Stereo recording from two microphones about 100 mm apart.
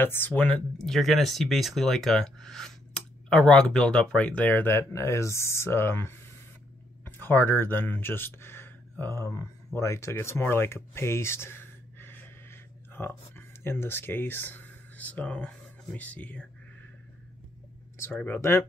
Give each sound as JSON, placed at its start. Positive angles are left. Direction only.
{"t": 0.0, "sound": "speech", "side_deg": 20}
{"t": 18.1, "sound": "speech", "side_deg": 20}